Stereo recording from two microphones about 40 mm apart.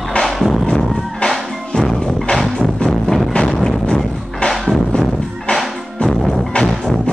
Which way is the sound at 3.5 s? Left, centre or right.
Centre.